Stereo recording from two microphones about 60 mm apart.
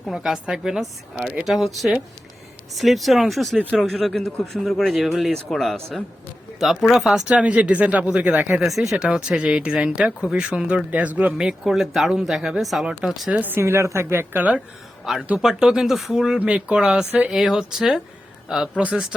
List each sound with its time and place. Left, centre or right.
0.1 s speech: centre
7.3 s speech: right
8.6 s speech: centre
10.9 s speech: right
11.3 s speech: centre
13.3 s speech: right
13.6 s a woman's voice: right
14.3 s speech: right
15.4 s speech: centre
16.4 s speech: right